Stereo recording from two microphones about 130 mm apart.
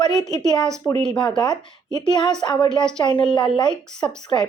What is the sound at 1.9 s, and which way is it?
Speech, 35° left (ahead or behind).